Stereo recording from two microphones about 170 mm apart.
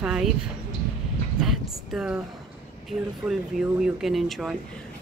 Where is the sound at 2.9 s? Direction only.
25° right (ahead or behind).